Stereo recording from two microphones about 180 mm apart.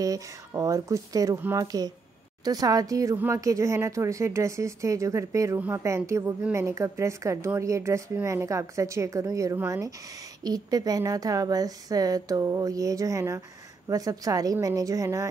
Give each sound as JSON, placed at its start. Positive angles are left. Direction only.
{"t": 0.0, "sound": "speech", "side_deg": -20}